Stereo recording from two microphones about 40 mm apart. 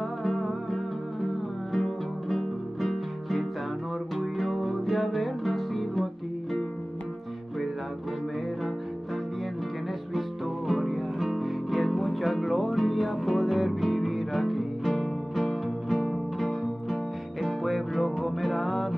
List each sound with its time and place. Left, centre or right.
0.2 s music: centre
4.2 s music: centre
10.7 s music: centre